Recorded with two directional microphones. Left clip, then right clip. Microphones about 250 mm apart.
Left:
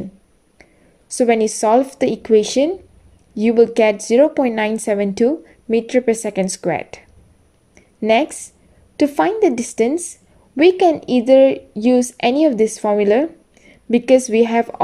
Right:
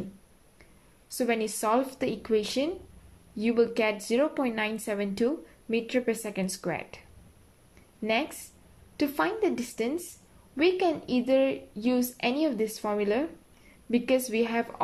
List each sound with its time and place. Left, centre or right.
0.6 s a woman's voice: left